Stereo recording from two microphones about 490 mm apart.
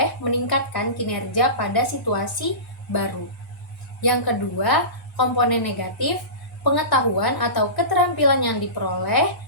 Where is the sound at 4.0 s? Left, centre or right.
Left.